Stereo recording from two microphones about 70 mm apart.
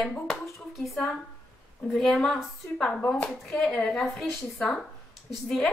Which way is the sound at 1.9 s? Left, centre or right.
Centre.